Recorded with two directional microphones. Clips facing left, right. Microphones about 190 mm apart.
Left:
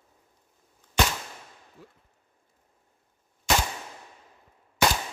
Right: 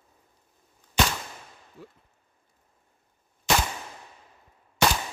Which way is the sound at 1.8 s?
65° right (ahead or behind).